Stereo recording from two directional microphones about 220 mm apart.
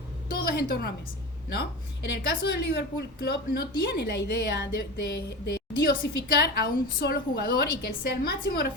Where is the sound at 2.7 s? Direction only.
45° left (ahead or behind).